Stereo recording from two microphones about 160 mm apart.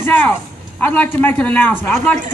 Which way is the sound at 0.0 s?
10° left (ahead or behind).